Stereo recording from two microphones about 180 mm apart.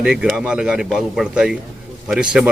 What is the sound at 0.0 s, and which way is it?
A man's voice, 5° right (ahead or behind).